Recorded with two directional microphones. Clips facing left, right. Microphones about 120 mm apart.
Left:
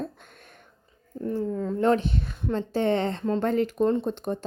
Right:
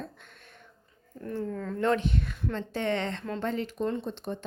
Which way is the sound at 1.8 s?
35° left (ahead or behind).